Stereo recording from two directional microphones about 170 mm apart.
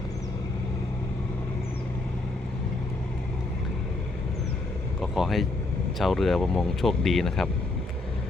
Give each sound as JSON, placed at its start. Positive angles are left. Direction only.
{"t": 4.9, "sound": "speech", "side_deg": 0}